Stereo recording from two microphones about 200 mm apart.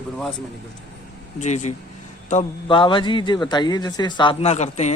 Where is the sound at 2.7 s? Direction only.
25° left (ahead or behind).